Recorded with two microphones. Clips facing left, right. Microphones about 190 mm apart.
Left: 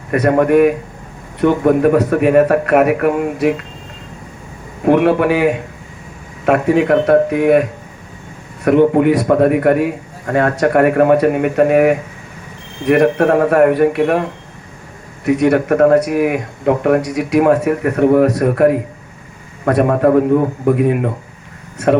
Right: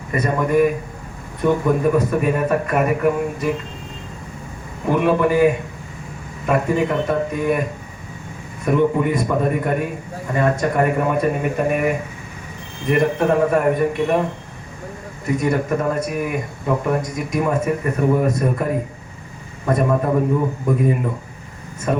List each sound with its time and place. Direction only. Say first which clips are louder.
0.1 s speech: left 7 dB; 75° left (ahead or behind)
4.9 s speech: left 5 dB; 75° left (ahead or behind)